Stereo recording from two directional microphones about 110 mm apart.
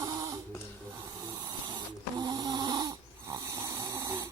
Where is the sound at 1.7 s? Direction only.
40° right (ahead or behind).